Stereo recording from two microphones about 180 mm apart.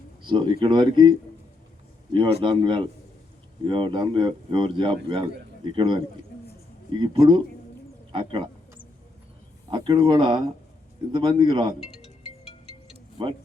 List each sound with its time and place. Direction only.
0.3 s speech: 25° right (ahead or behind)
2.1 s speech: 25° right (ahead or behind)
8.1 s a sound: 25° right (ahead or behind)
9.6 s speech: 25° right (ahead or behind)
11.9 s music: 35° left (ahead or behind)